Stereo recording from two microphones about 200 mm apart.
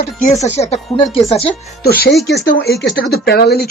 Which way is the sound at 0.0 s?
40° left (ahead or behind).